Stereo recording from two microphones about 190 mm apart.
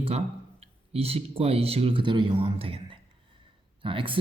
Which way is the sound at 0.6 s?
30° right (ahead or behind).